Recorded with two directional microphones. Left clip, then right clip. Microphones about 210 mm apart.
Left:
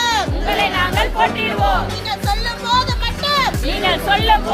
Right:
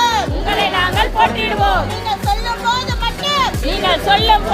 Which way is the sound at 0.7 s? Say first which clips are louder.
Right 2 dB; 50° right (ahead or behind).